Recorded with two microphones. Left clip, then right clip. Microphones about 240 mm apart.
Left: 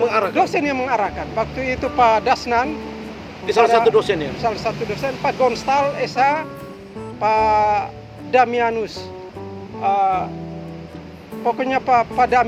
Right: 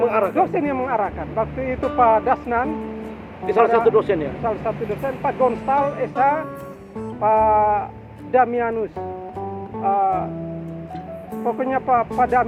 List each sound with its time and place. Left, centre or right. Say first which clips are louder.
0.0 s a man's voice: left 1 dB; centre
0.5 s speech: left 2 dB; left
3.4 s a man's voice: left 2 dB; centre
4.4 s speech: left 3 dB; left
9.8 s music: left 2 dB; left
11.4 s speech: left 2 dB; left